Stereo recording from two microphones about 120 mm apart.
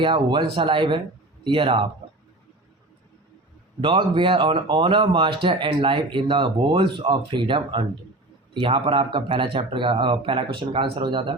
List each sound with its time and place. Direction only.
0.0 s speech: 40° right (ahead or behind)
3.8 s speech: 45° right (ahead or behind)